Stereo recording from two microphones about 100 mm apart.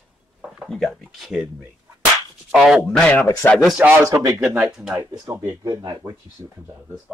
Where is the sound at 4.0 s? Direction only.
30° right (ahead or behind).